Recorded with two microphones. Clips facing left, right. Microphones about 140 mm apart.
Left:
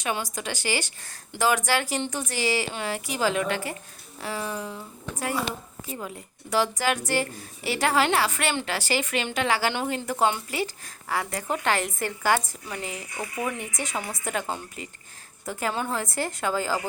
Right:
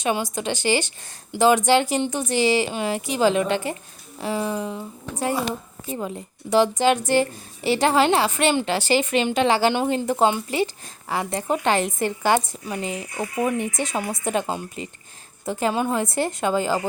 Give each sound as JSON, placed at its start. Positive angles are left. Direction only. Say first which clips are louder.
{"t": 0.0, "sound": "a woman's voice", "louder": "right 6 dB", "side_deg": -20}